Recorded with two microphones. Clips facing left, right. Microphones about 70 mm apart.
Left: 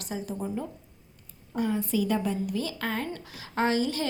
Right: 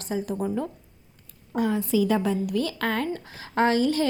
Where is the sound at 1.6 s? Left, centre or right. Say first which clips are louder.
Right 4 dB; right.